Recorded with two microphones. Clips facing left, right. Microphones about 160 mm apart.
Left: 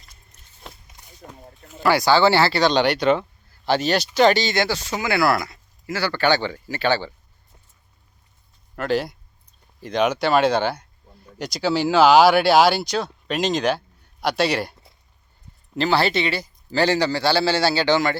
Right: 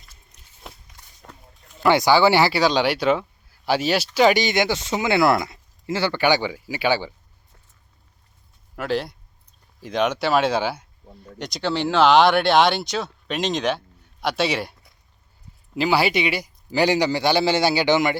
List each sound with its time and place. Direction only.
0.7 s run: 5° right (ahead or behind)
1.8 s speech: 20° right (ahead or behind)
8.7 s a man's voice: centre (ahead or behind); by 18.2 s 15° right (ahead or behind)